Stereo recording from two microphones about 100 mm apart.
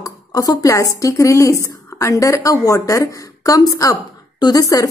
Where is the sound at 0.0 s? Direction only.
35° left (ahead or behind).